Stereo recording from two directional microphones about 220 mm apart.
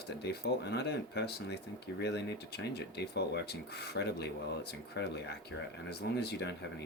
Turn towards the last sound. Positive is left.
turn(degrees=50)  # may be behind; listen again after turning